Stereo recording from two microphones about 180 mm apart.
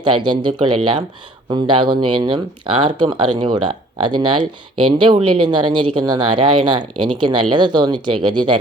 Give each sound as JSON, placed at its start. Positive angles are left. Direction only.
{"t": 0.0, "sound": "speech", "side_deg": -25}
{"t": 0.8, "sound": "speech", "side_deg": -35}
{"t": 1.5, "sound": "speech", "side_deg": -25}